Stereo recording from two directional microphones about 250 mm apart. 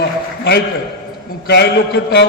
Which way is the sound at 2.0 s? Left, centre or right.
Left.